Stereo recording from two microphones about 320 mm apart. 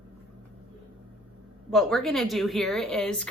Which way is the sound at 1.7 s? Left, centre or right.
Centre.